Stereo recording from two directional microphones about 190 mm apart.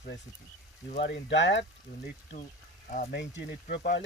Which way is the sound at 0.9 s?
65° left (ahead or behind).